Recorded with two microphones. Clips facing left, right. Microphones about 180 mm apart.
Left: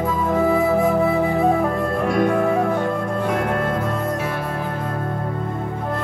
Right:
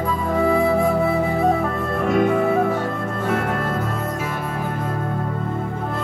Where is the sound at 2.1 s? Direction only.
5° right (ahead or behind).